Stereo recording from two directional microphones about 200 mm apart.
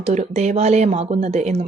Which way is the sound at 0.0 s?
35° right (ahead or behind).